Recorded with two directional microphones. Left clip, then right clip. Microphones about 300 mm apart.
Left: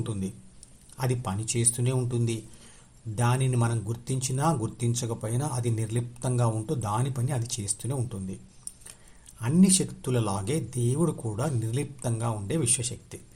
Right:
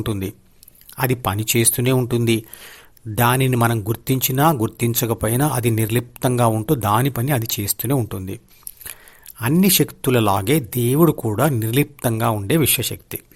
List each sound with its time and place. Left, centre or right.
0.0 s speech: right
9.4 s speech: right